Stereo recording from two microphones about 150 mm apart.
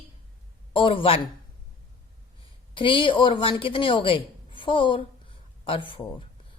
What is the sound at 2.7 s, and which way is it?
Speech, 35° left (ahead or behind).